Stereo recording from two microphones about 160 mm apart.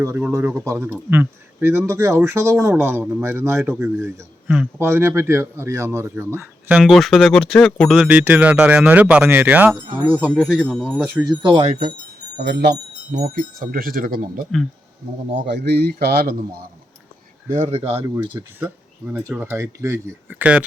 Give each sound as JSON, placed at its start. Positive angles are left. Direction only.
{"t": 0.0, "sound": "speech", "side_deg": -15}
{"t": 10.6, "sound": "speech", "side_deg": 5}
{"t": 11.2, "sound": "speech", "side_deg": -25}
{"t": 11.6, "sound": "speech", "side_deg": -55}
{"t": 12.4, "sound": "speech", "side_deg": -90}
{"t": 13.3, "sound": "speech", "side_deg": -60}
{"t": 15.5, "sound": "speech", "side_deg": -90}
{"t": 17.5, "sound": "speech", "side_deg": -45}
{"t": 18.1, "sound": "speech", "side_deg": -30}
{"t": 18.6, "sound": "speech", "side_deg": -10}